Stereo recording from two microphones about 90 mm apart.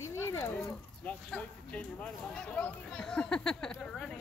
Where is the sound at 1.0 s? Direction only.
15° left (ahead or behind).